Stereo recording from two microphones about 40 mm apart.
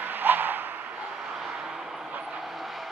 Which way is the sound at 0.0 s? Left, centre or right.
Right.